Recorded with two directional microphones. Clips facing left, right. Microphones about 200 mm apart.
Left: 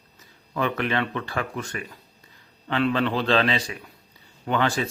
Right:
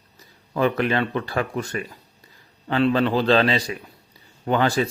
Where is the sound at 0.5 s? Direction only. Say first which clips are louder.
Right 4 dB; 35° right (ahead or behind).